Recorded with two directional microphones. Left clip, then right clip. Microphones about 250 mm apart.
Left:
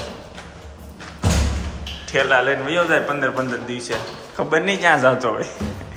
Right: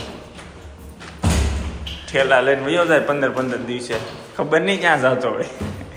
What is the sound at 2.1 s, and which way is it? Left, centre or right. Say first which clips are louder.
A man's voice: right 2 dB; centre.